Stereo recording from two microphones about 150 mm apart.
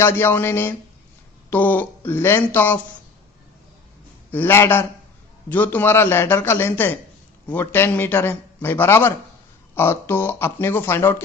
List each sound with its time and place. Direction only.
0.0 s a man's voice: 15° left (ahead or behind)
4.3 s a man's voice: 15° left (ahead or behind)